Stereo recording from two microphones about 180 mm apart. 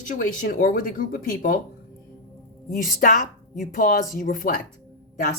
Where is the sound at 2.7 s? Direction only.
50° left (ahead or behind).